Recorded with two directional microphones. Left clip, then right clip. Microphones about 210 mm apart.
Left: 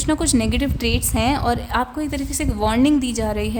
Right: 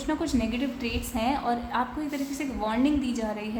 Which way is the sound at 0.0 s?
55° left (ahead or behind).